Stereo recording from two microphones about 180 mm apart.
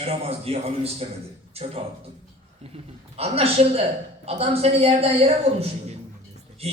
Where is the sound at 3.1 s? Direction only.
35° right (ahead or behind).